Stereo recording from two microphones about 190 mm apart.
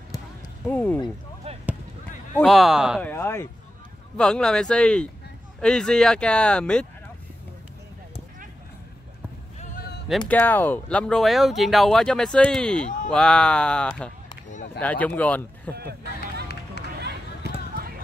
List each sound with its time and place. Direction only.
0.7 s speech: 10° left (ahead or behind)
2.4 s speech: centre (ahead or behind)
3.0 s speech: 10° left (ahead or behind)
10.0 s speech: 5° left (ahead or behind)
15.7 s a sound: 55° right (ahead or behind)
16.8 s music: 60° left (ahead or behind)